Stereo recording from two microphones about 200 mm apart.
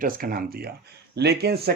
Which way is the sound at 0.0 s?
45° right (ahead or behind).